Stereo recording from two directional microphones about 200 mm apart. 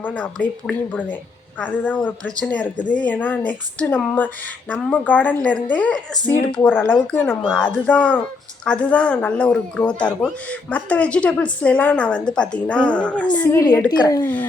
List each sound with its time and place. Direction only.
0.0 s a woman's voice: 5° left (ahead or behind)